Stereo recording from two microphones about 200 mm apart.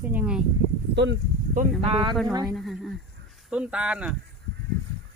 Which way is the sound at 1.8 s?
25° right (ahead or behind).